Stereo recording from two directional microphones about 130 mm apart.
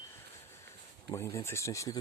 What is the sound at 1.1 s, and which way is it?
Speech, 25° left (ahead or behind).